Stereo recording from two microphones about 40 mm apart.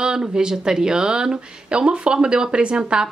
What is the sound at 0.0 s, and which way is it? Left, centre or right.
Speech, right.